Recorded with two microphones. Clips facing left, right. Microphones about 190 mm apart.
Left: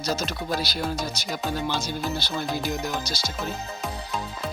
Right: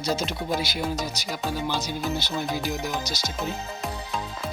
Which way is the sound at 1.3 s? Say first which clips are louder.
Left 1 dB; 5° right (ahead or behind).